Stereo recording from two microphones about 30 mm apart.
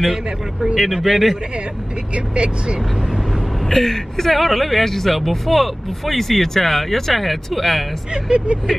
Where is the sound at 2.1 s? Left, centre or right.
Right.